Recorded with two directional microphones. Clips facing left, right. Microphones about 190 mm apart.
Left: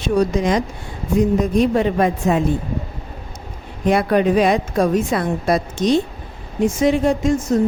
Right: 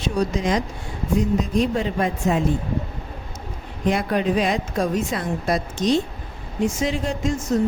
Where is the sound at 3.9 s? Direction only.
65° left (ahead or behind).